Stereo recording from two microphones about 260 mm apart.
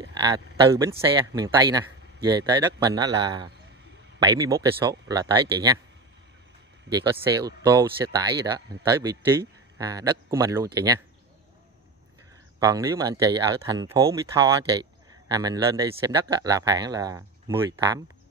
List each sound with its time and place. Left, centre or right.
0.2 s speech: centre
6.9 s speech: centre
12.5 s speech: centre